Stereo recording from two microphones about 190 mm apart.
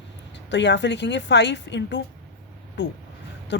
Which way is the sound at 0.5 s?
65° left (ahead or behind).